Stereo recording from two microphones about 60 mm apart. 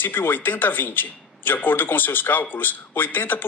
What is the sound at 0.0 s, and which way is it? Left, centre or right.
A man's voice, left.